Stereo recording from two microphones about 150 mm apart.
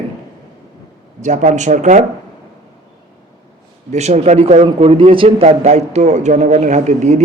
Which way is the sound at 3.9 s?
50° right (ahead or behind).